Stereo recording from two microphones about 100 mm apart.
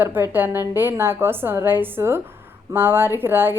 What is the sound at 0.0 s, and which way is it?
A woman's voice, 20° right (ahead or behind).